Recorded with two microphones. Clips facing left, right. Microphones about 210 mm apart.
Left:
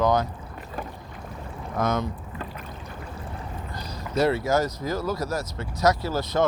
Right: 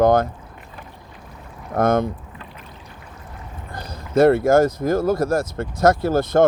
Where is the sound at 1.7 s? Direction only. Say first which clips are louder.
Right 8 dB; 50° right (ahead or behind).